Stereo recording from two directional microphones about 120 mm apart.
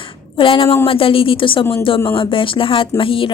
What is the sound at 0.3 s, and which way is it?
Speech, 45° left (ahead or behind).